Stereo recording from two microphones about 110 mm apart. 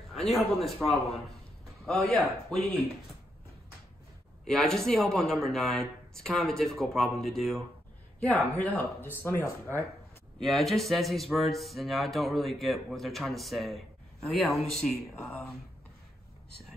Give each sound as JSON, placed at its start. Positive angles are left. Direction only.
{"t": 0.1, "sound": "a sound", "side_deg": 0}
{"t": 0.8, "sound": "speech", "side_deg": 5}
{"t": 4.5, "sound": "speech", "side_deg": 5}
{"t": 8.6, "sound": "speech", "side_deg": 15}
{"t": 10.4, "sound": "speech", "side_deg": 0}
{"t": 15.1, "sound": "speech", "side_deg": 15}